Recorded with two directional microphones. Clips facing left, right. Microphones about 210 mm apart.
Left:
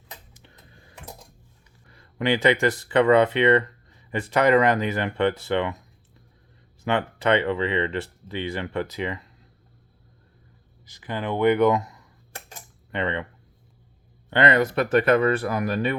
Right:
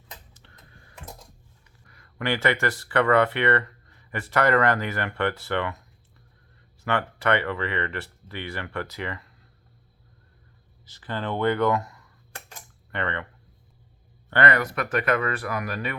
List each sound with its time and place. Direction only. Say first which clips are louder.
0.3 s a sound: left 3 dB; 10° left (ahead or behind)
1.9 s speech: left 4 dB; 25° left (ahead or behind)
6.8 s speech: left 2 dB; 20° left (ahead or behind)
10.8 s speech: left 2 dB; 15° left (ahead or behind)
12.5 s typing: left 3 dB; 20° left (ahead or behind)
14.3 s speech: left 3 dB; 20° left (ahead or behind)